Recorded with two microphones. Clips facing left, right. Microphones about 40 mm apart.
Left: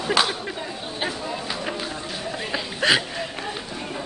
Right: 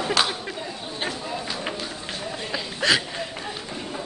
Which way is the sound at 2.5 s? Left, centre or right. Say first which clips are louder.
Left 2 dB; centre.